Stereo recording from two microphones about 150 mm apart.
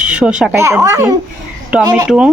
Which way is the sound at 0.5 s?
20° right (ahead or behind).